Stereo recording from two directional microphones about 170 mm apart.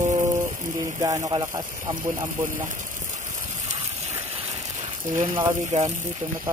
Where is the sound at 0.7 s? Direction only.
25° right (ahead or behind).